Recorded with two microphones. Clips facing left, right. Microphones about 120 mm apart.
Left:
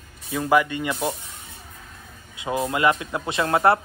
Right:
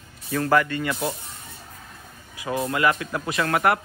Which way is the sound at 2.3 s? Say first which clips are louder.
Left 1 dB; 25° left (ahead or behind).